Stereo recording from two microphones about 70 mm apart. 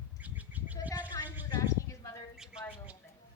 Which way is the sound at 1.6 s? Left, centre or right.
Left.